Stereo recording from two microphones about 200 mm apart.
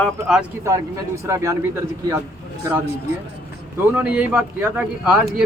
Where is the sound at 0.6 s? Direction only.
15° right (ahead or behind).